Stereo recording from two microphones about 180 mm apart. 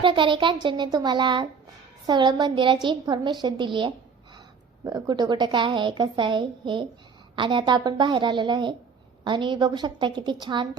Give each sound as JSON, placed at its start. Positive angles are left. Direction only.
{"t": 0.0, "sound": "a woman's voice", "side_deg": -25}